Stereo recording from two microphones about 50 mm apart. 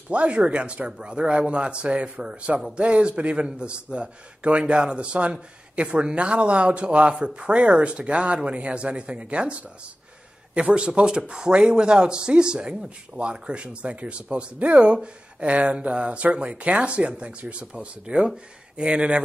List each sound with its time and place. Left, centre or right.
0.1 s a man's voice: right